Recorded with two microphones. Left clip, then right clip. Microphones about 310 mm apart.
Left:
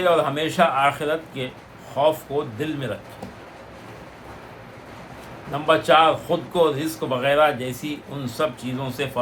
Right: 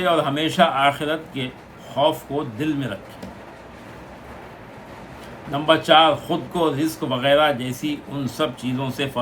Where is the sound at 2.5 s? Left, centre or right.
Centre.